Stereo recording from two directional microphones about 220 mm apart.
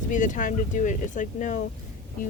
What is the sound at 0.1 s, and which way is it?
Speech, 35° left (ahead or behind).